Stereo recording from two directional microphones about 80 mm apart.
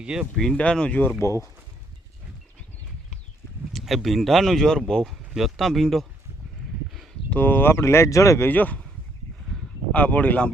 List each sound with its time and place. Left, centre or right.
0.0 s speech: centre
0.5 s speech: centre
1.2 s speech: left
3.8 s speech: centre
7.3 s speech: left
8.4 s speech: left
9.9 s speech: centre